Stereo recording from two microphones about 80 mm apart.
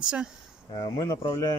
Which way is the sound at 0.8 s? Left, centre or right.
Left.